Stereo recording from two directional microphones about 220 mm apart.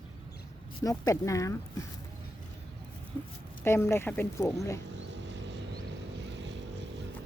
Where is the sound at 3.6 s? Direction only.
10° left (ahead or behind).